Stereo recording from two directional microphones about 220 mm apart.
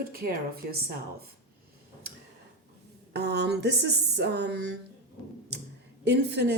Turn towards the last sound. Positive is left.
turn(degrees=-50)  # may be behind; listen again after turning